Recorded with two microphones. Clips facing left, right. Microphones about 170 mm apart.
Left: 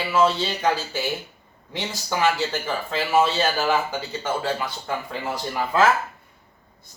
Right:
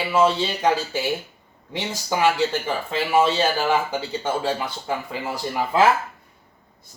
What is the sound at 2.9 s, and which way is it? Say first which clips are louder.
Speech: right 1 dB; 15° right (ahead or behind).